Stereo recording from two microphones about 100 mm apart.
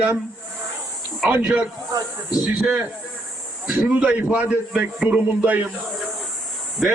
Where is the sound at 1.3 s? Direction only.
15° right (ahead or behind).